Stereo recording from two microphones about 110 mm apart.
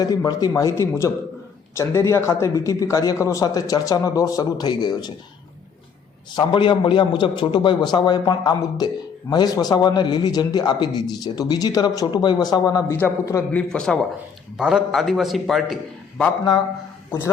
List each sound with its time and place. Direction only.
0.3 s a man's voice: 35° left (ahead or behind)
6.3 s a man's voice: 45° left (ahead or behind)
13.0 s a man's voice: 15° left (ahead or behind)
14.6 s a man's voice: 5° right (ahead or behind)